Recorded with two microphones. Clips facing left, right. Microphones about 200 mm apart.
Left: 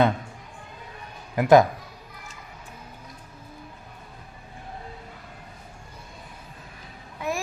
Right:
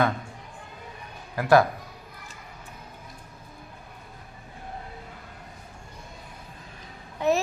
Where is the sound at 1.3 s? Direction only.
20° left (ahead or behind).